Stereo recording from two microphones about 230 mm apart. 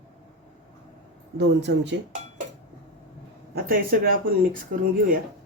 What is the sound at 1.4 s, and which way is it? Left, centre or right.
Speech, right.